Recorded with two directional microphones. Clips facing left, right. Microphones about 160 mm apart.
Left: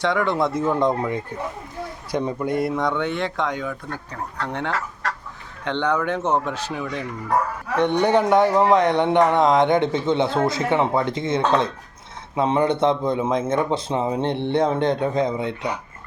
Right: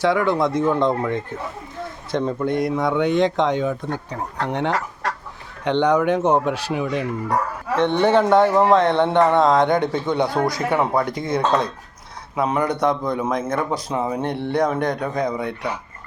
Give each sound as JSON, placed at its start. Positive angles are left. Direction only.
{"t": 0.0, "sound": "speech", "side_deg": -5}
{"t": 7.8, "sound": "speech", "side_deg": 15}